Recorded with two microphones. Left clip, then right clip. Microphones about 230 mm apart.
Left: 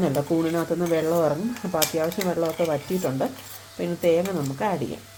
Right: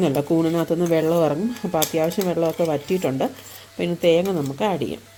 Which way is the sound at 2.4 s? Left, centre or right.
Right.